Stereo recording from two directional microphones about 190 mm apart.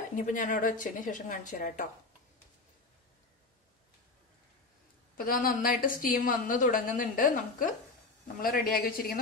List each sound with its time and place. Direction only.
0.1 s a woman's voice: 40° left (ahead or behind)
5.1 s a woman's voice: 50° left (ahead or behind)